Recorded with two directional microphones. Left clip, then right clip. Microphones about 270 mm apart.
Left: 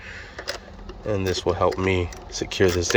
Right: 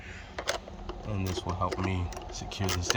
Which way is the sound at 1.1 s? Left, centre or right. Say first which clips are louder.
Left 13 dB; left.